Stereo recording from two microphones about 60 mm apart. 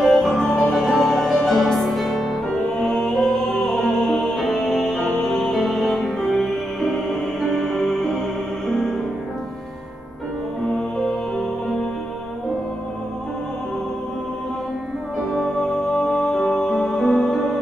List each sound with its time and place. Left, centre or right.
0.0 s music: centre
2.5 s music: centre
10.8 s music: centre
15.1 s music: centre